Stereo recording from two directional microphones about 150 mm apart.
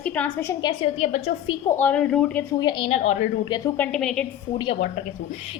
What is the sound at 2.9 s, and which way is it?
Speech, 50° left (ahead or behind).